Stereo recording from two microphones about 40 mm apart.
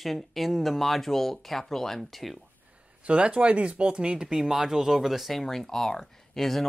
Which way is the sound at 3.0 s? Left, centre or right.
Right.